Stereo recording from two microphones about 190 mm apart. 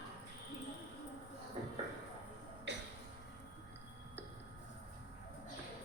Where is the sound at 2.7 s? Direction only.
70° right (ahead or behind).